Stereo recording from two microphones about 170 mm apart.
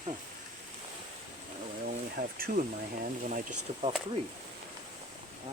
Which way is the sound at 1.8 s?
60° right (ahead or behind).